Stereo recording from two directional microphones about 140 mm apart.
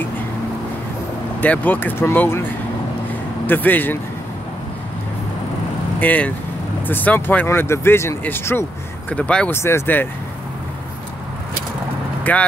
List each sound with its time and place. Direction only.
1.4 s speech: 10° left (ahead or behind)
3.4 s speech: 15° left (ahead or behind)
5.9 s speech: 10° left (ahead or behind)
12.2 s speech: 10° left (ahead or behind)